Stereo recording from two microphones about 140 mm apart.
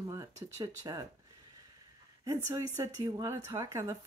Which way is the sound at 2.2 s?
20° right (ahead or behind).